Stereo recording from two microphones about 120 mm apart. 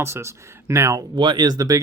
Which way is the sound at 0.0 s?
20° right (ahead or behind).